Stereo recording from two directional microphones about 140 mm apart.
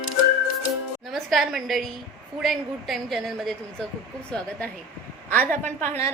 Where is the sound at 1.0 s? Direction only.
Centre (ahead or behind).